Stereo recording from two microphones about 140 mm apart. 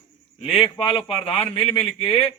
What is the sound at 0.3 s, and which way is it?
Speech, 45° left (ahead or behind).